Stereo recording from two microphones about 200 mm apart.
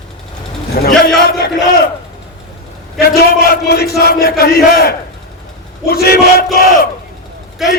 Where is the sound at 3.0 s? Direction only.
50° left (ahead or behind).